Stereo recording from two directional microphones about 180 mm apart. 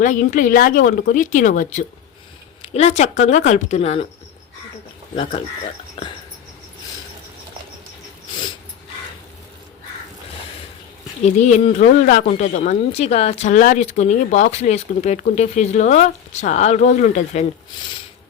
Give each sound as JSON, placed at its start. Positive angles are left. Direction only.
{"t": 0.0, "sound": "a woman's voice", "side_deg": 45}
{"t": 5.1, "sound": "speech", "side_deg": 30}
{"t": 11.2, "sound": "a woman's voice", "side_deg": 40}